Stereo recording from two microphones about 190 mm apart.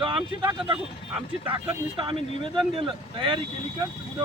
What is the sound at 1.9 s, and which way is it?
Speech, 25° right (ahead or behind).